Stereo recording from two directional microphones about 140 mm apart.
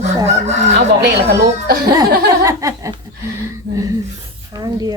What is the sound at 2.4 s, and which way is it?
Speech, 25° right (ahead or behind).